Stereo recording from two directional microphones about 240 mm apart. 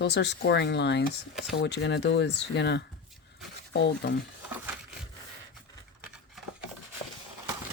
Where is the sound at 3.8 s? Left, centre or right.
Left.